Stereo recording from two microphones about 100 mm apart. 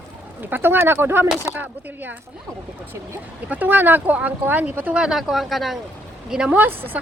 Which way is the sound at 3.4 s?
20° right (ahead or behind).